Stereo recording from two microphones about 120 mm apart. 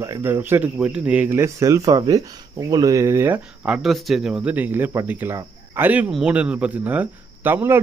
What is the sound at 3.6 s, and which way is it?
Speech, 5° right (ahead or behind).